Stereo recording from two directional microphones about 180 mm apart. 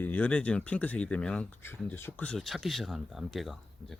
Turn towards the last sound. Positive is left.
turn(degrees=0)  # may be behind; listen again after turning